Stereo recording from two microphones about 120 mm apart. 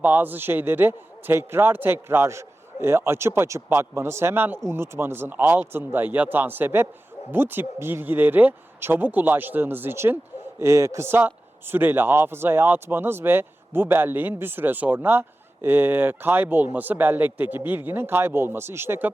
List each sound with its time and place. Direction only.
0.0 s a man's voice: 15° right (ahead or behind)